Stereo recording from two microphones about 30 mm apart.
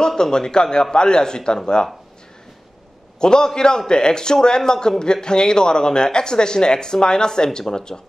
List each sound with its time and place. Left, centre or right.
0.1 s a man's voice: left
3.2 s a man's voice: left